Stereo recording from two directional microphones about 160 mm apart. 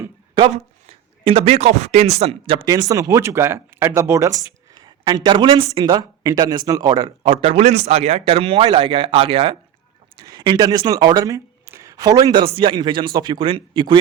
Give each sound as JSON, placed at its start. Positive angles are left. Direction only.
{"t": 0.3, "sound": "speech", "side_deg": -35}
{"t": 2.6, "sound": "speech", "side_deg": -25}
{"t": 7.2, "sound": "speech", "side_deg": -40}